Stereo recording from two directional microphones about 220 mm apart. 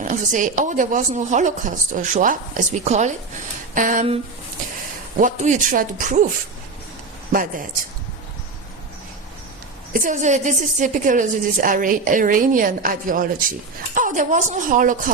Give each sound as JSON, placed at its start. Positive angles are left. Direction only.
{"t": 0.0, "sound": "a woman's voice", "side_deg": -35}
{"t": 9.9, "sound": "a woman's voice", "side_deg": -35}